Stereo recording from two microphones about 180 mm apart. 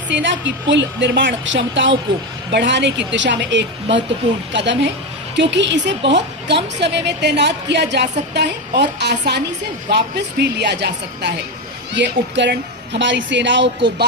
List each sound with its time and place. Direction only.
0.1 s a woman's voice: 90° right